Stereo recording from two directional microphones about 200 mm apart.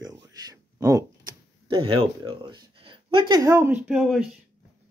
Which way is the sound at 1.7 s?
25° right (ahead or behind).